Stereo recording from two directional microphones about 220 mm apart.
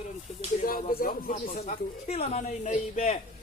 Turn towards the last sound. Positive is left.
turn(degrees=35)  # may be behind; listen again after turning